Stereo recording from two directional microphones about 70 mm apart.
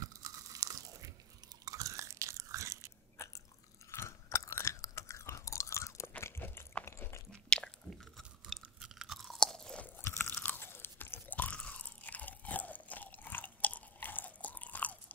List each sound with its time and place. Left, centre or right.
0.0 s crunch: right
1.6 s chewing: right
3.9 s chewing: left
6.2 s crunch: left
7.4 s biting: centre
8.8 s chewing: centre
9.4 s chewing: centre
10.0 s chewing: left